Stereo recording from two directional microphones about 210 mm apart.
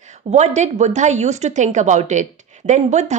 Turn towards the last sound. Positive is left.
turn(degrees=-35)  # may be behind; listen again after turning